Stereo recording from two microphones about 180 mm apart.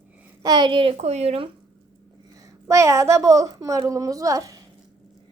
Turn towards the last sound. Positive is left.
turn(degrees=-20)  # may be behind; listen again after turning